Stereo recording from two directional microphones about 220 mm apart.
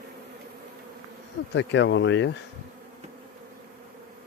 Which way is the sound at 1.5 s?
55° left (ahead or behind).